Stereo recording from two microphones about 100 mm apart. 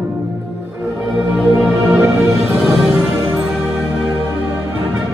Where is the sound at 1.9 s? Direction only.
30° right (ahead or behind).